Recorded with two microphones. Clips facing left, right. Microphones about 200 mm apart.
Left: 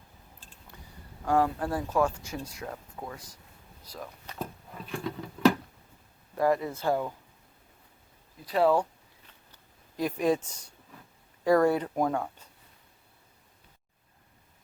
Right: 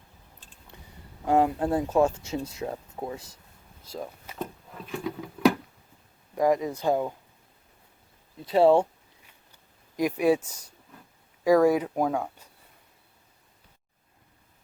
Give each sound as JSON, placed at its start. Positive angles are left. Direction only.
{"t": 1.2, "sound": "speech", "side_deg": -20}
{"t": 4.9, "sound": "a sound", "side_deg": -5}
{"t": 6.3, "sound": "speech", "side_deg": -15}
{"t": 8.4, "sound": "speech", "side_deg": -25}
{"t": 10.0, "sound": "speech", "side_deg": -10}